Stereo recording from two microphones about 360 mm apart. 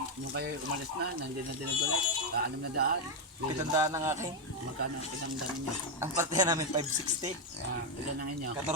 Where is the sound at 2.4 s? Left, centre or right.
Right.